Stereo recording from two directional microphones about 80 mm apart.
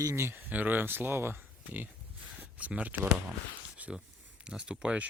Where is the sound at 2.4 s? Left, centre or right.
Centre.